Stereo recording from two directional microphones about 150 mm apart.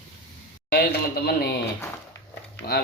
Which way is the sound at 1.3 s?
90° left.